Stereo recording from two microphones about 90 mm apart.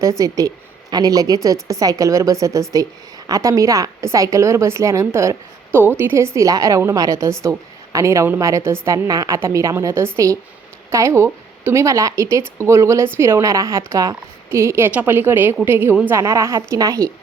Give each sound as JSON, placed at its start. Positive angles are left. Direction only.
{"t": 0.0, "sound": "a woman's voice", "side_deg": -40}